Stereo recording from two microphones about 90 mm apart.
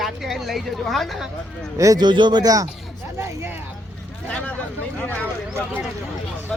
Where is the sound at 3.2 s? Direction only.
25° right (ahead or behind).